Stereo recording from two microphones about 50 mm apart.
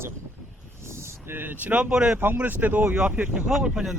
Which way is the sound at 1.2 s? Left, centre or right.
Right.